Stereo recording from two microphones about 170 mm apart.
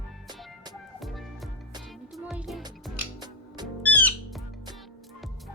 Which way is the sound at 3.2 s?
25° right (ahead or behind).